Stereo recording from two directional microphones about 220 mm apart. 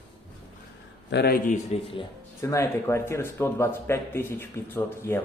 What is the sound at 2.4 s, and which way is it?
Speech, 15° left (ahead or behind).